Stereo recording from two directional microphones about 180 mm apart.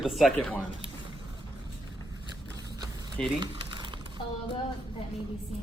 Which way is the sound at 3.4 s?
25° right (ahead or behind).